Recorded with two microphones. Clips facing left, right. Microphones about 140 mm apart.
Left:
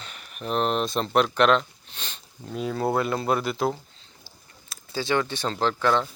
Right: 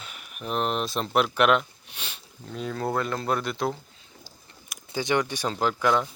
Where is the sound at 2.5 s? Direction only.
10° left (ahead or behind).